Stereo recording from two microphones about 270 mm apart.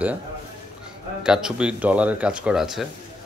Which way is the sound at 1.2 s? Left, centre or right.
Centre.